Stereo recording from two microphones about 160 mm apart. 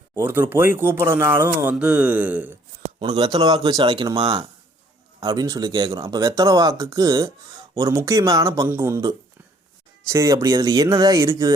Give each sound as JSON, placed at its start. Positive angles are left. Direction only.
{"t": 0.1, "sound": "speech", "side_deg": -15}
{"t": 3.0, "sound": "speech", "side_deg": -25}